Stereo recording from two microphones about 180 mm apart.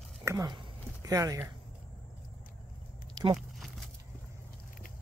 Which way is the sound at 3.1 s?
25° right (ahead or behind).